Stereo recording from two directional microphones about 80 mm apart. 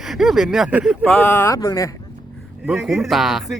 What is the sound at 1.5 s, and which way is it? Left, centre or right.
Speech, left.